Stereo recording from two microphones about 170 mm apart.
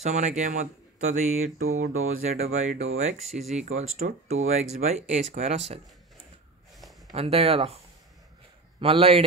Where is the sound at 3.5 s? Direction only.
45° right (ahead or behind).